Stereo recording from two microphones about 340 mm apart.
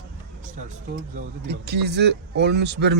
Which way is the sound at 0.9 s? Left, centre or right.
Right.